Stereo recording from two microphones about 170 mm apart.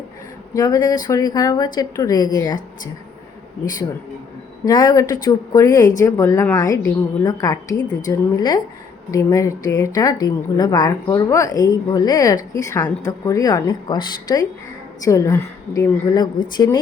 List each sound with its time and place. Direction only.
0.5 s a woman's voice: 20° left (ahead or behind)
4.6 s a woman's voice: 20° left (ahead or behind)